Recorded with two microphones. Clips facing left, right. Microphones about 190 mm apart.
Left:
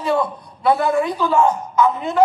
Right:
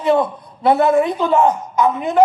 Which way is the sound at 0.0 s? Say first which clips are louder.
Right 4 dB; 20° right (ahead or behind).